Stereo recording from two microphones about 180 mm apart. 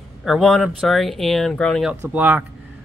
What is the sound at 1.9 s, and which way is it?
Speech, 10° right (ahead or behind).